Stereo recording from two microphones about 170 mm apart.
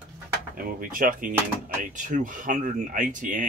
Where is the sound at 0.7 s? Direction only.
55° right (ahead or behind).